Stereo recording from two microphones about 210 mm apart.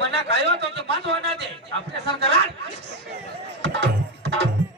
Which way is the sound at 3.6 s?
55° right (ahead or behind).